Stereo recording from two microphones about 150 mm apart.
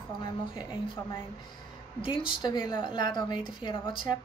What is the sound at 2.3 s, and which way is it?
Speech, 30° left (ahead or behind).